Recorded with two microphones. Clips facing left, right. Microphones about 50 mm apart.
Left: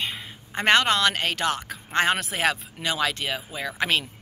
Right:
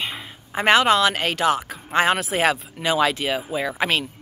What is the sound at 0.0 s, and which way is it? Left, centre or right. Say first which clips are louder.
Speech: right 1 dB; centre.